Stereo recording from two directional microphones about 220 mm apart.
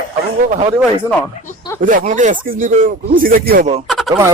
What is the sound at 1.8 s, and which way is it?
Speech, 35° right (ahead or behind).